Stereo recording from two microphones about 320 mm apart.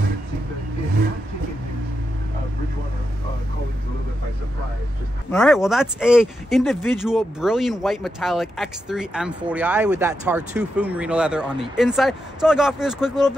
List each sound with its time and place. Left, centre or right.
5.3 s speech: centre